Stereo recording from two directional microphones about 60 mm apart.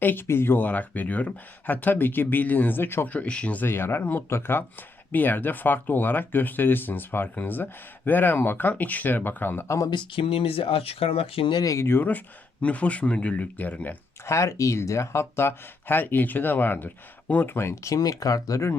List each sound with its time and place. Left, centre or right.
0.0 s speech: left
3.1 s speech: left
3.6 s speech: left
5.1 s speech: left
9.6 s speech: left
11.6 s speech: left
11.9 s speech: left
14.3 s speech: left
17.8 s speech: left